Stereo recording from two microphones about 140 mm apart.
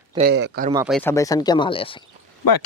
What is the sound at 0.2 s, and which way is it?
Speech, 75° right (ahead or behind).